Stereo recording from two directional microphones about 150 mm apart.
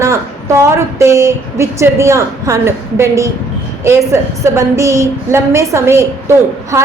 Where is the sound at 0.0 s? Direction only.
20° right (ahead or behind).